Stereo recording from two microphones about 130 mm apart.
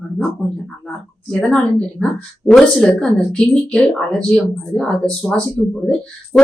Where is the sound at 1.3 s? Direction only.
5° left (ahead or behind).